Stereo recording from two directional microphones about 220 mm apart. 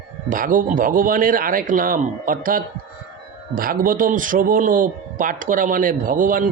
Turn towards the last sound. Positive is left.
turn(degrees=-40)  # may be behind; listen again after turning